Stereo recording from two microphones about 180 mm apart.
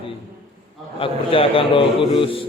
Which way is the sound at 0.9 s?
30° left (ahead or behind).